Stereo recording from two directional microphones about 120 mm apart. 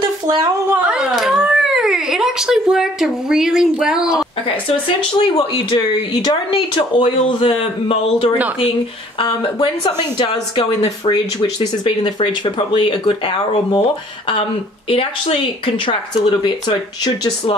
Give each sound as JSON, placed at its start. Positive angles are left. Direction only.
{"t": 0.0, "sound": "a sound", "side_deg": -35}
{"t": 0.8, "sound": "a sound", "side_deg": -5}
{"t": 4.6, "sound": "speech", "side_deg": 45}
{"t": 5.8, "sound": "speech", "side_deg": 35}
{"t": 9.8, "sound": "speech", "side_deg": 35}
{"t": 14.9, "sound": "speech", "side_deg": 50}